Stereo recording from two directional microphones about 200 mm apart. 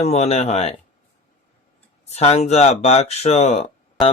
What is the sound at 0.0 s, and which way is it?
Speech, 30° left (ahead or behind).